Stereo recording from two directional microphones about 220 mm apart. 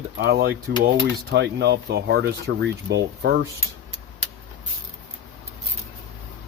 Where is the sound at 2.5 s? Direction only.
60° right (ahead or behind).